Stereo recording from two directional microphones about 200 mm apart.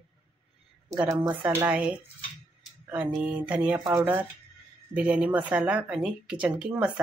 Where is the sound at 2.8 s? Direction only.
10° right (ahead or behind).